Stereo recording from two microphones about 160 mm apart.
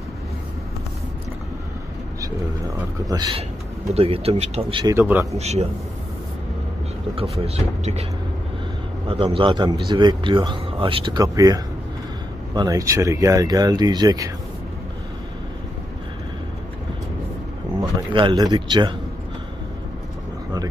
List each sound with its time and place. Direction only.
3.1 s speech: 25° right (ahead or behind)
3.9 s speech: 40° right (ahead or behind)
4.8 s a man's voice: 15° right (ahead or behind)
5.4 s a man's voice: 40° right (ahead or behind)
7.2 s speech: 40° right (ahead or behind)
9.0 s speech: 35° right (ahead or behind)
17.7 s speech: 25° right (ahead or behind)